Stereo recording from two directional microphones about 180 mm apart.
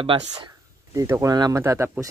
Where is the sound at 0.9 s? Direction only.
15° right (ahead or behind).